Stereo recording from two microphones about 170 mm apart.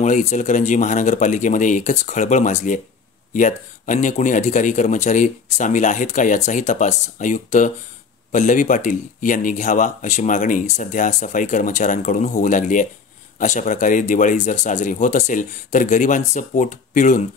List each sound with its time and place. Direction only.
0.0 s speech: 45° left (ahead or behind)